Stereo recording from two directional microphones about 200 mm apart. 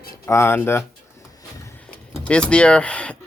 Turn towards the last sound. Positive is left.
turn(degrees=5)  # may be behind; listen again after turning